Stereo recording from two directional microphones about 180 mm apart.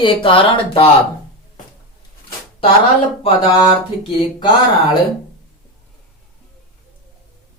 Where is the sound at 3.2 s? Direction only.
30° left (ahead or behind).